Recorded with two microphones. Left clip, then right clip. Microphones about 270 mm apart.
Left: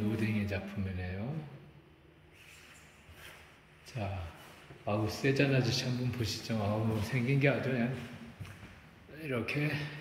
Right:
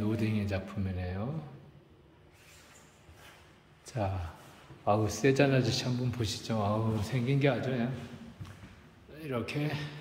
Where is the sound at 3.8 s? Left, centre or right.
Centre.